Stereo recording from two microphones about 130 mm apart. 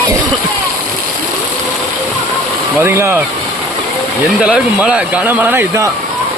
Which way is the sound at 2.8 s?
20° right (ahead or behind).